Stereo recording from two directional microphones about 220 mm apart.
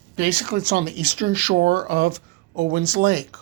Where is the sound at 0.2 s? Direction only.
40° right (ahead or behind).